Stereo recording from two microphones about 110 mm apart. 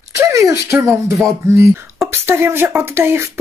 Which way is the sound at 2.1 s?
20° right (ahead or behind).